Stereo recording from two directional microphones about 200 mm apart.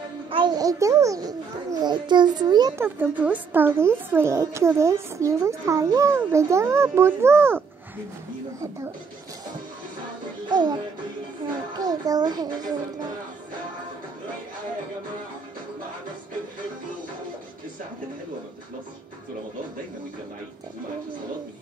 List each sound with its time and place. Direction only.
0.3 s a child's voice: 20° right (ahead or behind)
11.8 s a child's voice: 20° right (ahead or behind)